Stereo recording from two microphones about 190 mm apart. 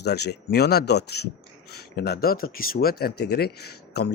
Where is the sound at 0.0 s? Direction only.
60° left (ahead or behind).